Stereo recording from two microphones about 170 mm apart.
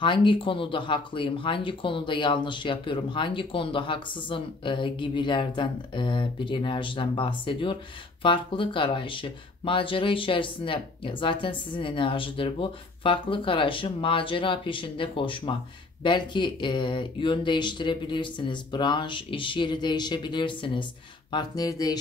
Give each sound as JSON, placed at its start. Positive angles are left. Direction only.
{"t": 0.0, "sound": "speech", "side_deg": 30}